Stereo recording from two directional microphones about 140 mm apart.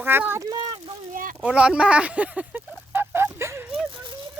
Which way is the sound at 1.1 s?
75° right (ahead or behind).